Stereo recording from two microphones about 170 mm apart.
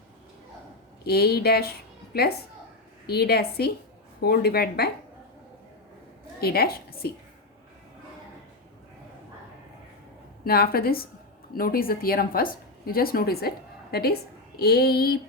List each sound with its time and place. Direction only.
1.0 s speech: 65° left (ahead or behind)
3.1 s speech: 70° left (ahead or behind)
6.4 s a woman's voice: 65° left (ahead or behind)
10.4 s a woman's voice: 60° left (ahead or behind)